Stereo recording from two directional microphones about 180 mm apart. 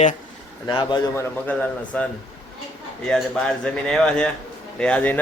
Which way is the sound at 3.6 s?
5° left (ahead or behind).